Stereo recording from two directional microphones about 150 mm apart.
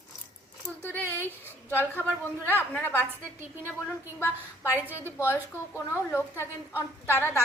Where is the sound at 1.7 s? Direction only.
15° left (ahead or behind).